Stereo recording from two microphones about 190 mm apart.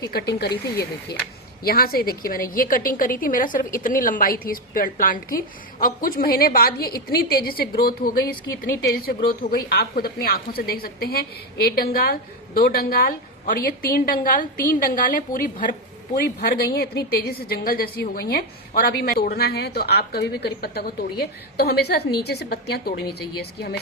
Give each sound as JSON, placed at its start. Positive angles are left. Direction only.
{"t": 0.1, "sound": "a woman's voice", "side_deg": 55}